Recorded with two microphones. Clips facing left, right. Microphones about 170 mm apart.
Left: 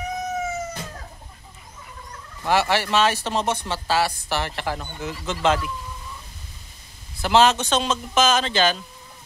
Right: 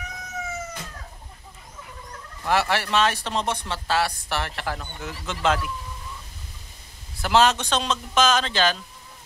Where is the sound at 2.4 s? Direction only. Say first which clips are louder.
Left 2 dB; centre (ahead or behind).